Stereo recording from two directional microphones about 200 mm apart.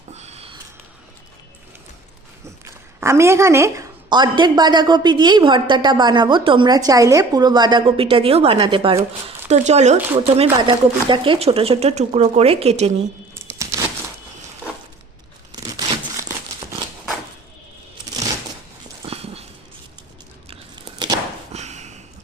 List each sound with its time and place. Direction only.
0.1 s sniff: 35° right (ahead or behind)
3.0 s a woman's voice: 15° right (ahead or behind); by 12.9 s 30° right (ahead or behind)
13.3 s tearing: 15° right (ahead or behind)
15.5 s crumpling: 20° right (ahead or behind)
19.0 s dog: 30° right (ahead or behind)
20.5 s a sound: 25° right (ahead or behind)
21.5 s a sound: 35° right (ahead or behind)